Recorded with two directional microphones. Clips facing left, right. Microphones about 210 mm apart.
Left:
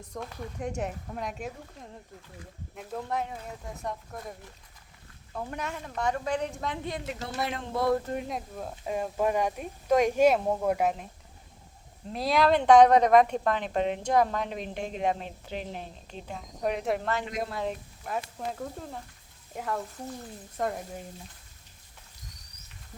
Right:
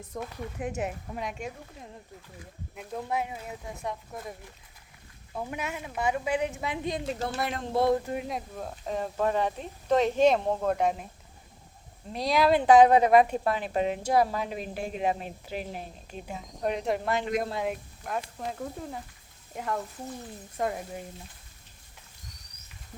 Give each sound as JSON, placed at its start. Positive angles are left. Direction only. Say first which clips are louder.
{"t": 0.0, "sound": "speech", "louder": "right 2 dB", "side_deg": -5}
{"t": 6.9, "sound": "a woman's voice", "louder": "right 3 dB", "side_deg": -30}
{"t": 7.9, "sound": "speech", "louder": "even", "side_deg": -10}
{"t": 12.1, "sound": "speech", "louder": "even", "side_deg": 0}
{"t": 17.1, "sound": "speech", "louder": "right 3 dB", "side_deg": -15}
{"t": 17.7, "sound": "speech", "louder": "right 1 dB", "side_deg": 0}